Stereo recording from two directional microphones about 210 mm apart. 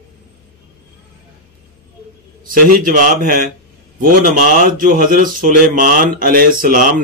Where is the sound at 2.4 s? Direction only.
40° right (ahead or behind).